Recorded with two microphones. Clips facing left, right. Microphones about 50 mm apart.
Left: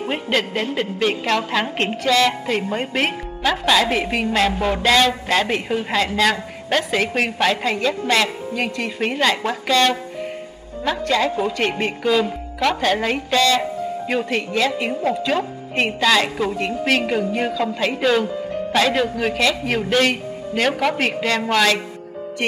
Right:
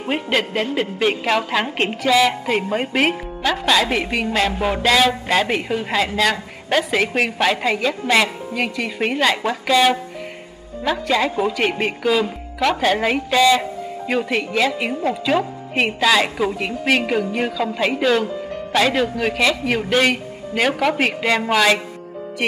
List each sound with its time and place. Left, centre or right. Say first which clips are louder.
0.0 s a woman's voice: right 1 dB; centre